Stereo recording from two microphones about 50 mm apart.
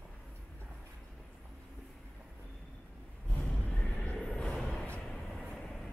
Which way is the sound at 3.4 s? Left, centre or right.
Left.